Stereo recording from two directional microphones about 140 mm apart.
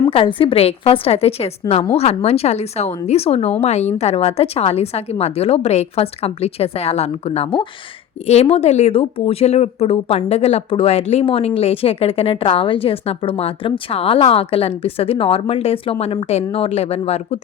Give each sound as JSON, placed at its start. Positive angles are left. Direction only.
{"t": 0.1, "sound": "speech", "side_deg": 40}